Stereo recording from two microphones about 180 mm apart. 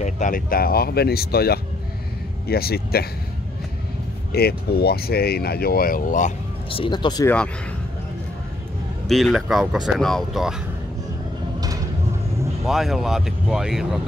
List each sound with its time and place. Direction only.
0.0 s speech: 45° left (ahead or behind)
4.3 s speech: 60° left (ahead or behind)
6.7 s speech: 25° left (ahead or behind)
9.0 s speech: centre (ahead or behind)
12.6 s speech: centre (ahead or behind)